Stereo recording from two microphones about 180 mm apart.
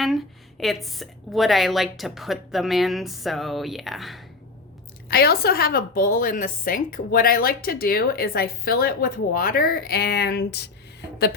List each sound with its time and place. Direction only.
0.6 s a woman's voice: centre (ahead or behind)
5.0 s a woman's voice: 60° left (ahead or behind)